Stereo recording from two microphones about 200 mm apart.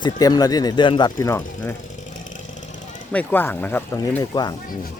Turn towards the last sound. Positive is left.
turn(degrees=10)  # may be behind; listen again after turning